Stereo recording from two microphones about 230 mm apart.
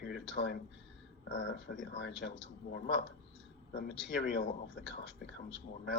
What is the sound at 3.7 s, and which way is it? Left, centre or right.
Speech, left.